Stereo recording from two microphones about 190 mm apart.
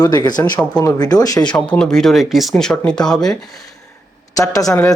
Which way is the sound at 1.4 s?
5° left (ahead or behind).